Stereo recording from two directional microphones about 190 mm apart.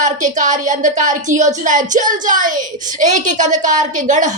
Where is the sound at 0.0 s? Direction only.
40° right (ahead or behind).